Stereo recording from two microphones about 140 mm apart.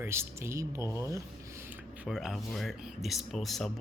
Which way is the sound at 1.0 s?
20° right (ahead or behind).